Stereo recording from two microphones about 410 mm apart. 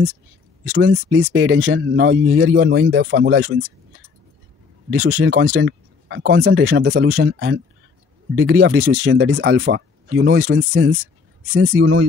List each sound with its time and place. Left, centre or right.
0.7 s speech: right
4.9 s speech: right